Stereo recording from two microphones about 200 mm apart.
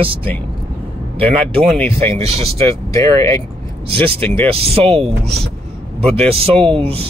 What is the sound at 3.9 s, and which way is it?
Speech, 30° right (ahead or behind).